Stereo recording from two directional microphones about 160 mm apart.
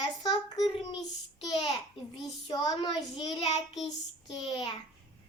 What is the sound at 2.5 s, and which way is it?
A child's voice, 25° left (ahead or behind).